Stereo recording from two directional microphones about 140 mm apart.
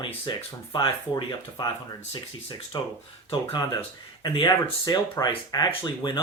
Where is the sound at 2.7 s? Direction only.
35° left (ahead or behind).